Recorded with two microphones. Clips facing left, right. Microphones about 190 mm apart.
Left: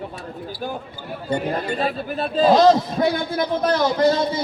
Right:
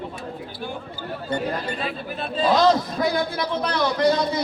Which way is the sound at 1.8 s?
45° left (ahead or behind).